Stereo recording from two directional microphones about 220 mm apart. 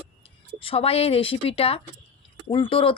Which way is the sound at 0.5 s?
25° left (ahead or behind).